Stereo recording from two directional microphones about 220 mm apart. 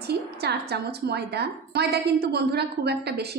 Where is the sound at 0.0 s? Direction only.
50° right (ahead or behind).